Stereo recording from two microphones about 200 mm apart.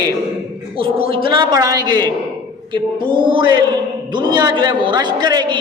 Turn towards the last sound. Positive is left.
turn(degrees=-20)  # may be behind; listen again after turning